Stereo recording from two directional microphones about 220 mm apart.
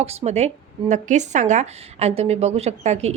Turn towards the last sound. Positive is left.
turn(degrees=-30)  # may be behind; listen again after turning